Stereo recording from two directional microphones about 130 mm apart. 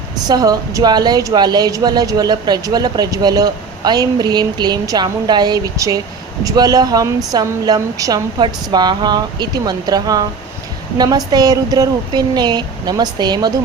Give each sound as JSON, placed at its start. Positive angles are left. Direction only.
{"t": 0.3, "sound": "a woman's voice", "side_deg": -30}